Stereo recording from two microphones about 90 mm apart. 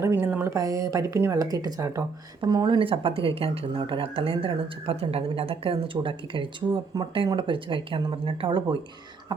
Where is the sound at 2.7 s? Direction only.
75° right (ahead or behind).